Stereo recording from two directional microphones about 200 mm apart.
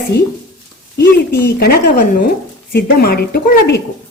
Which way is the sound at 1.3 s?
50° left (ahead or behind).